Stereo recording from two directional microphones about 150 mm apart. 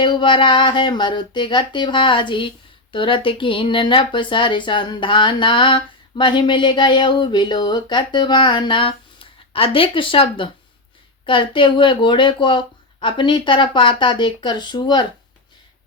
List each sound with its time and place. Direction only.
0.0 s speech: 30° left (ahead or behind)